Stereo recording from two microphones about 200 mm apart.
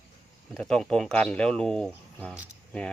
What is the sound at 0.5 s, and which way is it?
Speech, centre (ahead or behind).